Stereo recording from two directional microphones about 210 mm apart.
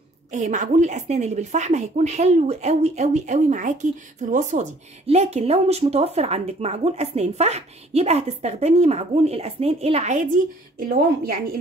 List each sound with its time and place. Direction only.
0.3 s a woman's voice: 35° right (ahead or behind)